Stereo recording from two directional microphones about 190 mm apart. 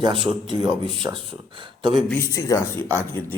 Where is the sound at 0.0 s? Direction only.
25° right (ahead or behind).